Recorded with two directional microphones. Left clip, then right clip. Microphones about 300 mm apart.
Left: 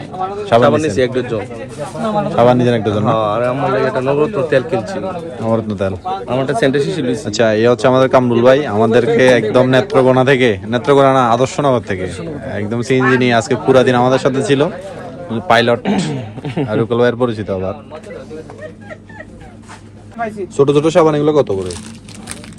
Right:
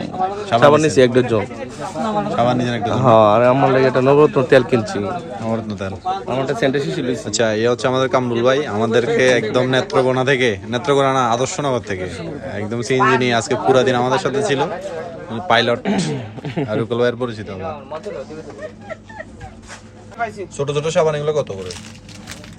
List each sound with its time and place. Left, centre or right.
0.6 s speech: right
2.3 s a man's voice: centre
2.9 s a man's voice: right
5.5 s a man's voice: centre
20.6 s speech: centre